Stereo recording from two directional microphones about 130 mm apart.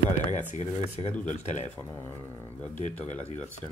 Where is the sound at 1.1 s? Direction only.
10° left (ahead or behind).